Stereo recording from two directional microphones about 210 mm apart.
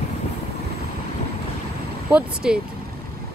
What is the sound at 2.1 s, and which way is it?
Speech, 5° right (ahead or behind).